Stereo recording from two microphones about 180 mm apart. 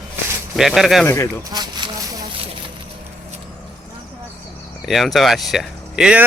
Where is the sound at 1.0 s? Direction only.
15° left (ahead or behind).